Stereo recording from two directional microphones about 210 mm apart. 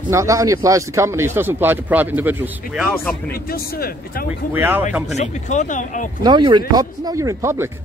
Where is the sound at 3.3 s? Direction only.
45° left (ahead or behind).